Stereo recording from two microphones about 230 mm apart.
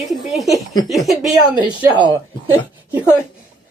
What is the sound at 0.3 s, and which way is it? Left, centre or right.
Speech, centre.